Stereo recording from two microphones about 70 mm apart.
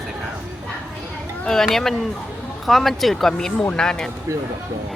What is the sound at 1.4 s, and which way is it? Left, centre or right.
Speech, centre.